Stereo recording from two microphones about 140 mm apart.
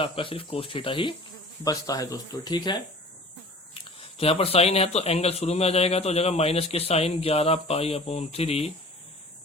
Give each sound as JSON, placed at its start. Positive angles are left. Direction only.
{"t": 0.0, "sound": "speech", "side_deg": 40}
{"t": 1.6, "sound": "speech", "side_deg": 25}
{"t": 4.0, "sound": "speech", "side_deg": 45}